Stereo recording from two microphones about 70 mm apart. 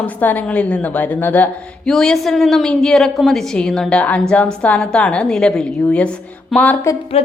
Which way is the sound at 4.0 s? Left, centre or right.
Left.